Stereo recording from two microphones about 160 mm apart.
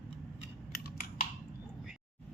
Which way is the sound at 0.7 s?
65° left (ahead or behind).